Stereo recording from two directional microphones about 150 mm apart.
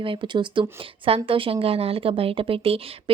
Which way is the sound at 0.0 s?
35° right (ahead or behind).